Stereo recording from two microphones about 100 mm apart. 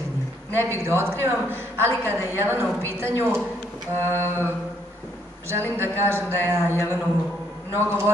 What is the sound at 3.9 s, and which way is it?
Speech, 25° right (ahead or behind).